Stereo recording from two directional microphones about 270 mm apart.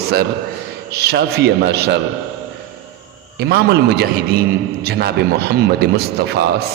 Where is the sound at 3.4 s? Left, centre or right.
Right.